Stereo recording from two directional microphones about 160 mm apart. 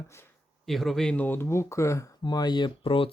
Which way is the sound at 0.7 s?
Centre (ahead or behind).